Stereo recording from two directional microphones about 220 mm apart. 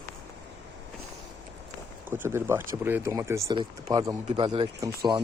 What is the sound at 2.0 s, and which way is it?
Speech, 10° right (ahead or behind).